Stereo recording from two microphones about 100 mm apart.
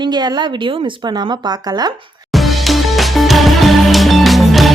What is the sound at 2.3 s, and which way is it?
Music, centre (ahead or behind).